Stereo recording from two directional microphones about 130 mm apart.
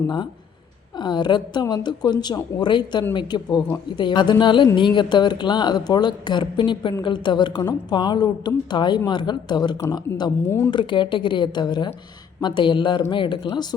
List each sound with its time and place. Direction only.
0.9 s a woman's voice: 35° left (ahead or behind)